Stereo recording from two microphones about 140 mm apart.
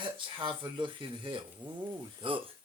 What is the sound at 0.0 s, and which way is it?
Speech, 35° right (ahead or behind).